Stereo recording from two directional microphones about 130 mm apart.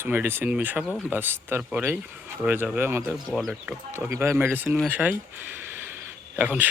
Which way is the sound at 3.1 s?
Centre (ahead or behind).